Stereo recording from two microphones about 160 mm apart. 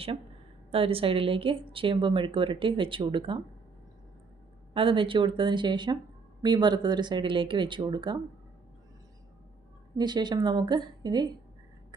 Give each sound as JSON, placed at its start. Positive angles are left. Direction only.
{"t": 0.7, "sound": "speech", "side_deg": -35}
{"t": 4.7, "sound": "speech", "side_deg": -35}
{"t": 10.0, "sound": "speech", "side_deg": -25}